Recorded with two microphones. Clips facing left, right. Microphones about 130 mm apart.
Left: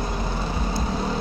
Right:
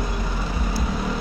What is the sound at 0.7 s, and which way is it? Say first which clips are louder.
Vehicle: even; 30° left (ahead or behind).